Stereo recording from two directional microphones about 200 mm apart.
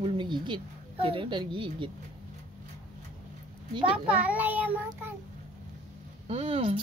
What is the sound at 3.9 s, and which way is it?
Child singing, 5° right (ahead or behind).